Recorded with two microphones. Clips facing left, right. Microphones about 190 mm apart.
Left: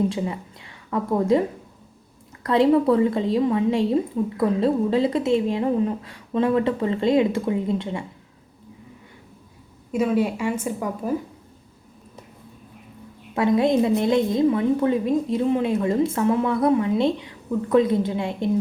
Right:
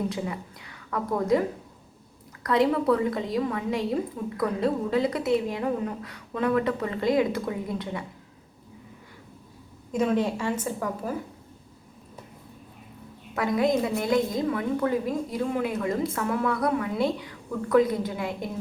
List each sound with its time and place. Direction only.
0.1 s a woman's voice: 25° left (ahead or behind)
9.9 s a woman's voice: 5° left (ahead or behind)
13.3 s a woman's voice: 25° left (ahead or behind)